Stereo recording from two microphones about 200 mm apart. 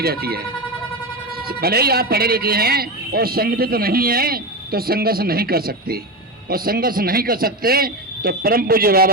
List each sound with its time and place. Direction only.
0.0 s a man's voice: 50° right (ahead or behind)